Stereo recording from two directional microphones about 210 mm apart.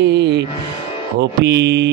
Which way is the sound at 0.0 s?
55° right (ahead or behind).